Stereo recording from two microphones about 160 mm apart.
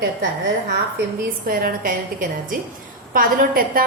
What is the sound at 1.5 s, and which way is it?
A woman's voice, 65° right (ahead or behind).